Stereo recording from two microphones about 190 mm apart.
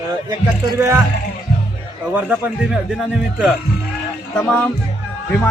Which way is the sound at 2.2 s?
10° right (ahead or behind).